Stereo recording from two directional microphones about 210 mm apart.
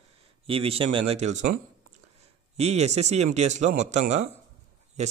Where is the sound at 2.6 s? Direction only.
30° right (ahead or behind).